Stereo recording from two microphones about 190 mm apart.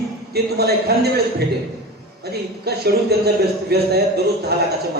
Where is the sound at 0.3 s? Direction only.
55° right (ahead or behind).